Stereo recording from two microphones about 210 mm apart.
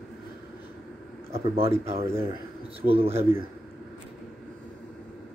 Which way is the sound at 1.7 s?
10° right (ahead or behind).